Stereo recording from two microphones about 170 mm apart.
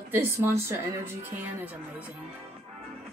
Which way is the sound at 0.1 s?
15° right (ahead or behind).